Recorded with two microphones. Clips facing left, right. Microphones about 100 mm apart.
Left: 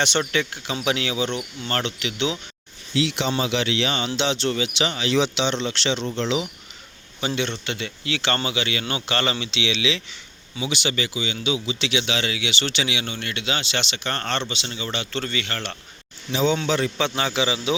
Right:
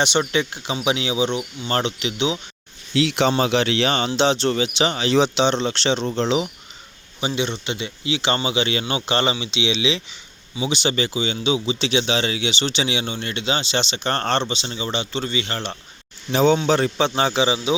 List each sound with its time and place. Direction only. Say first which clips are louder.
0.0 s speech: right 3 dB; 15° right (ahead or behind)
2.9 s speech: right 4 dB; 65° right (ahead or behind)
3.3 s speech: right 4 dB; 45° right (ahead or behind)
7.2 s speech: right 2 dB; 15° right (ahead or behind)
16.3 s speech: right 5 dB; 45° right (ahead or behind); by 17.7 s 25° right (ahead or behind)